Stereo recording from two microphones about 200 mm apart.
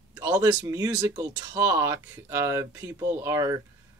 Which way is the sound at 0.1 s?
20° right (ahead or behind).